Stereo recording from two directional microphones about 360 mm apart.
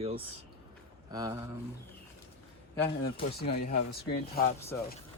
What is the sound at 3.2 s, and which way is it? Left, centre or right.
Speech, left.